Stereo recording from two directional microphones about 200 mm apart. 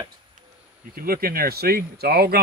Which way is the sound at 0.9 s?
45° right (ahead or behind).